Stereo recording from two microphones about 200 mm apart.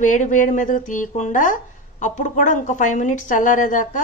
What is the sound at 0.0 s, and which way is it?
A woman's voice, 40° left (ahead or behind).